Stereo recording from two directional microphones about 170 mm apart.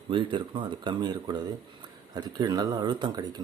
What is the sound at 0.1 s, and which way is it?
Speech, 30° right (ahead or behind).